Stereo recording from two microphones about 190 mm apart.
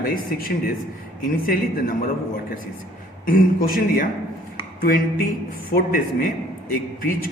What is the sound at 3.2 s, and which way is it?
A man's voice, 50° left (ahead or behind).